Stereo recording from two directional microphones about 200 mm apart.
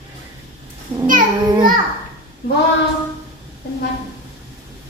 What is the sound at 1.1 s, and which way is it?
Speech, 45° right (ahead or behind).